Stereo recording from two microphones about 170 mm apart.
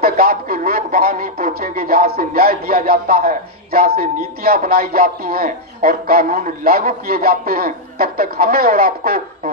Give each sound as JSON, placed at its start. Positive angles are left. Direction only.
{"t": 0.0, "sound": "a man's voice", "side_deg": -65}